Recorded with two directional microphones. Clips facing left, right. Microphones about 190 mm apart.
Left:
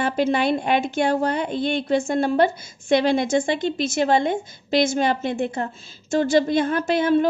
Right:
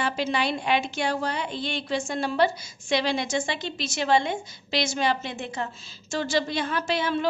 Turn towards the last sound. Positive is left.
turn(degrees=50)  # may be behind; listen again after turning